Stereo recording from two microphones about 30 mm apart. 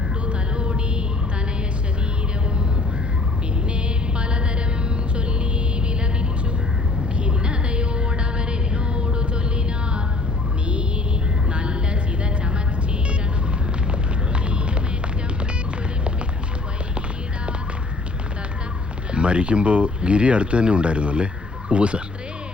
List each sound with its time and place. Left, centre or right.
0.3 s a sound: right
3.8 s music: right
7.2 s music: right
11.5 s vehicle: right
19.1 s speech: right